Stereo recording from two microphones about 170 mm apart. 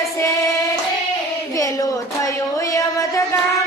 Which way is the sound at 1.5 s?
20° left (ahead or behind).